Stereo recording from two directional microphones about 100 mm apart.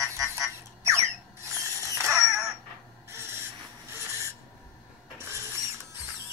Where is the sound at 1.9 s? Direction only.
30° right (ahead or behind).